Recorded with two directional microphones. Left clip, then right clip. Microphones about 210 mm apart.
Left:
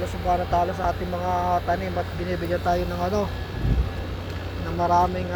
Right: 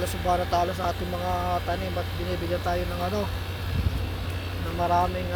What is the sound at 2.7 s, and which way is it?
Speech, 5° left (ahead or behind).